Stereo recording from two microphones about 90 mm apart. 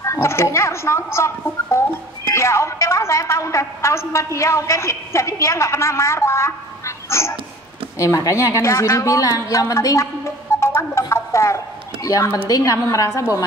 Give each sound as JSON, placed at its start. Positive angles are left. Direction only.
{"t": 0.0, "sound": "a woman's voice", "side_deg": 30}
{"t": 9.5, "sound": "a sound", "side_deg": 40}
{"t": 12.4, "sound": "a woman's voice", "side_deg": 40}
{"t": 12.7, "sound": "a woman's voice", "side_deg": 30}